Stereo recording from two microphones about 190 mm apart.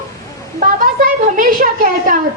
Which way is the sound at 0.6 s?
45° right (ahead or behind).